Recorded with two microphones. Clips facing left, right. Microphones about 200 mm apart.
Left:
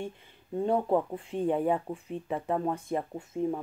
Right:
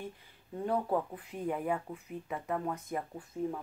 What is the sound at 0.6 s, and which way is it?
Speech, 25° left (ahead or behind).